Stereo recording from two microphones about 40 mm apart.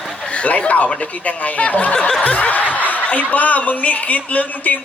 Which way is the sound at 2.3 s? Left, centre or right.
Left.